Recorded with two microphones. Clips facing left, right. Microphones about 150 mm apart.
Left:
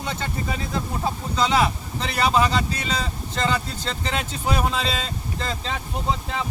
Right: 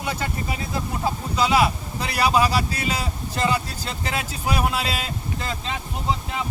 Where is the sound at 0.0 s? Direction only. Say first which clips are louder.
Right 1 dB; 10° right (ahead or behind).